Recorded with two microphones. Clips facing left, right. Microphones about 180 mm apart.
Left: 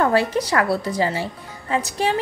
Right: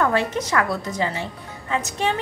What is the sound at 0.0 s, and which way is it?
A woman's voice, 35° left (ahead or behind).